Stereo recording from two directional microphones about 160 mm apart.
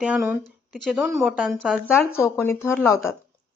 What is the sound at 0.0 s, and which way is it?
A woman's voice, 10° right (ahead or behind).